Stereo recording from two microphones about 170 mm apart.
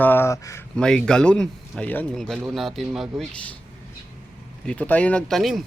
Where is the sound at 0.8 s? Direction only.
5° left (ahead or behind).